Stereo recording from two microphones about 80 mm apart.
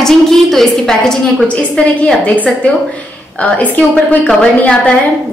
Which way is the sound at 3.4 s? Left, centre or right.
Centre.